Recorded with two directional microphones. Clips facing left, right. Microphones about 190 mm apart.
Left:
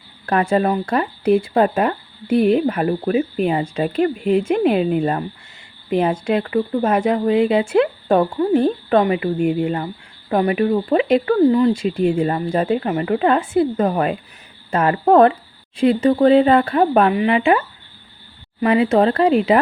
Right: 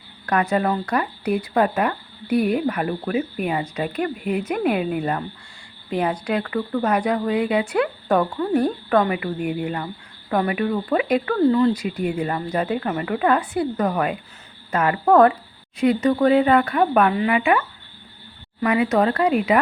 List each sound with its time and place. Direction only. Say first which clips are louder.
0.3 s speech: left 3 dB; 30° left (ahead or behind)